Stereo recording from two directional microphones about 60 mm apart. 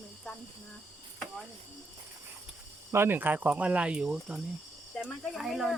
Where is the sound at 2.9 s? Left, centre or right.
Right; by 4.4 s centre.